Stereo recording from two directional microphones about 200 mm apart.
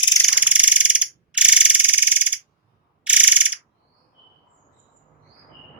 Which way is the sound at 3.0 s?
5° right (ahead or behind).